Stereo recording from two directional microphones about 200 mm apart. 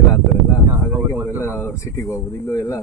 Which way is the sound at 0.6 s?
15° right (ahead or behind).